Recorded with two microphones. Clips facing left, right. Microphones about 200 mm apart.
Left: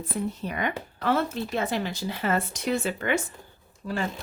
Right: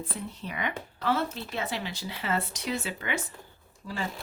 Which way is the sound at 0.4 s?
45° left (ahead or behind).